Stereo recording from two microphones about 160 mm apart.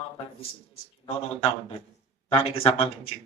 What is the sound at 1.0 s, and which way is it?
Speech, 35° left (ahead or behind).